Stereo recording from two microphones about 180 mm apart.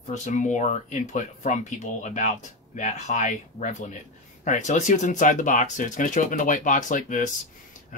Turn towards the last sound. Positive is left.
turn(degrees=45)  # may be behind; listen again after turning